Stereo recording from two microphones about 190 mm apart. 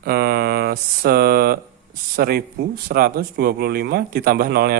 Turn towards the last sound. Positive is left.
turn(degrees=-55)  # may be behind; listen again after turning